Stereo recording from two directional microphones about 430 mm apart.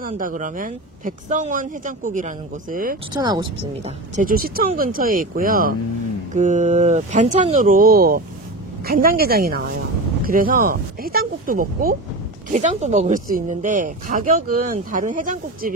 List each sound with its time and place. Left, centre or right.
0.0 s speech: centre